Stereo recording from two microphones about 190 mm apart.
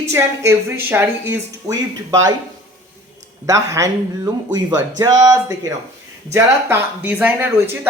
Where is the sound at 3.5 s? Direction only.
15° right (ahead or behind).